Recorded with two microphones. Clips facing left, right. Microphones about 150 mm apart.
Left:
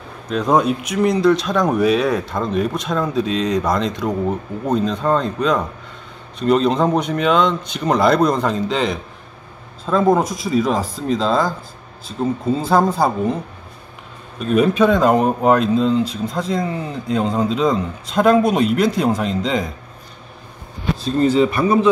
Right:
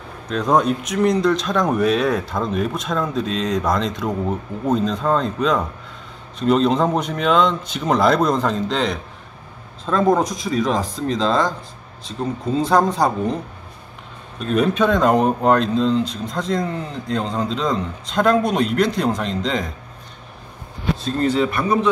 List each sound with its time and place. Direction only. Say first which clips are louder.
0.3 s speech: left 1 dB; centre (ahead or behind)
14.4 s speech: left 3 dB; 5° left (ahead or behind)
21.0 s speech: left 4 dB; centre (ahead or behind)